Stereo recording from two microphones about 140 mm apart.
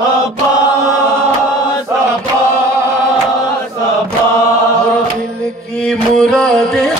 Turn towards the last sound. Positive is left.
turn(degrees=5)  # may be behind; listen again after turning